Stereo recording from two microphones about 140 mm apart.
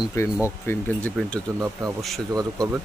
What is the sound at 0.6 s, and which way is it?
Speech, 10° left (ahead or behind).